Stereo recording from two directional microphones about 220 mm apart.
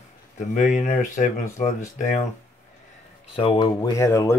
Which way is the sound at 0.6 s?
35° left (ahead or behind).